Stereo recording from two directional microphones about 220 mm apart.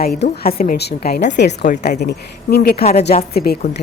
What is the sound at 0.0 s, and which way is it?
Speech, 45° left (ahead or behind).